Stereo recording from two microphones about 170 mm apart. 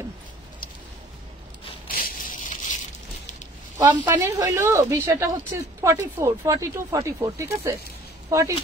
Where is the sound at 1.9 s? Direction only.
55° left (ahead or behind).